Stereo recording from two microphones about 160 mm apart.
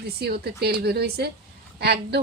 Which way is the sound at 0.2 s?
85° right.